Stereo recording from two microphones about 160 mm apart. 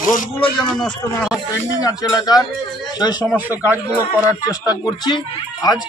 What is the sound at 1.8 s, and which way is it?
Speech, 25° left (ahead or behind).